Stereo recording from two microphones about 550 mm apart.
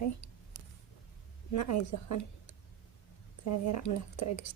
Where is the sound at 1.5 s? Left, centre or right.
Left.